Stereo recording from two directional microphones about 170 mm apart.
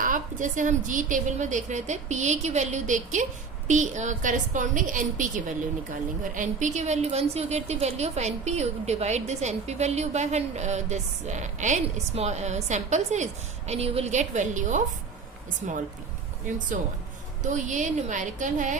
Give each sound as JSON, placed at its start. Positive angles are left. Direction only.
{"t": 0.0, "sound": "a woman's voice", "side_deg": -50}
{"t": 17.4, "sound": "a woman's voice", "side_deg": -45}